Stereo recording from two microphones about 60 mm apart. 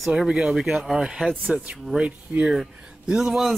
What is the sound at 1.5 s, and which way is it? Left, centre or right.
Speech, right.